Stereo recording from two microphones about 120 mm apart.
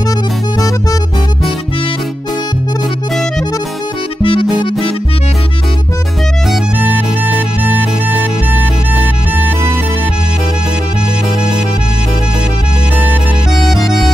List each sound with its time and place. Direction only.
4.2 s music: 45° left (ahead or behind)